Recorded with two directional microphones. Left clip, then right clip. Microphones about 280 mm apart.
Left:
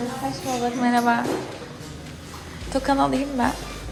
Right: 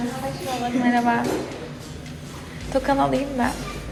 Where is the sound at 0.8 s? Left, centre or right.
Centre.